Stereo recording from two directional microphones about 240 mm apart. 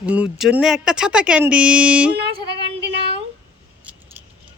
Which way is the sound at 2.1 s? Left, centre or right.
Right.